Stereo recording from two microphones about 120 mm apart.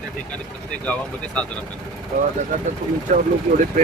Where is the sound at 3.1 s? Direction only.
75° right (ahead or behind).